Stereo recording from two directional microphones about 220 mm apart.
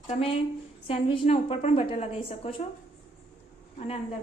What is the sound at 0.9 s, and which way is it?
A woman's voice, 25° left (ahead or behind).